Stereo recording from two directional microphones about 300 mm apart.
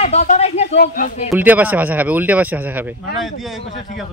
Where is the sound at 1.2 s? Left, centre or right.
Centre.